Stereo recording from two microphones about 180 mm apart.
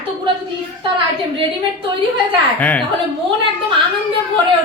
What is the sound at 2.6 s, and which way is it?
Speech, 10° left (ahead or behind).